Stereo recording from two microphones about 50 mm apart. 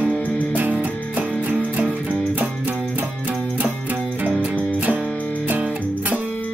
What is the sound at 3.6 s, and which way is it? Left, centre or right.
Music, right.